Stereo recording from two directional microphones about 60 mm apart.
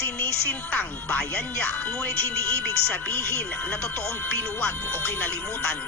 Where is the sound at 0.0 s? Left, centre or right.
Left.